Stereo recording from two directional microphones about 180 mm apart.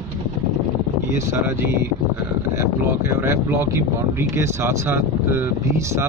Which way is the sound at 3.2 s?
15° right (ahead or behind).